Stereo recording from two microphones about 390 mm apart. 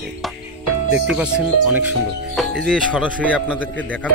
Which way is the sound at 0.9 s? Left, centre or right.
Centre.